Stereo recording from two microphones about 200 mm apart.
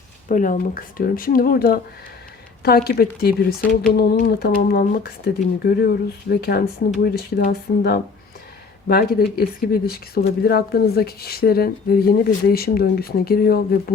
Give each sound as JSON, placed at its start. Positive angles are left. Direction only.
{"t": 0.3, "sound": "speech", "side_deg": 40}